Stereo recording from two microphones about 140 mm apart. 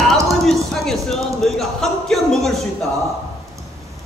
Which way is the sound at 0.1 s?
Centre (ahead or behind).